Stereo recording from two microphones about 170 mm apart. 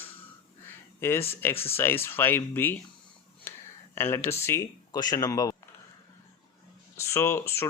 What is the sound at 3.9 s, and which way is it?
Speech, 15° left (ahead or behind).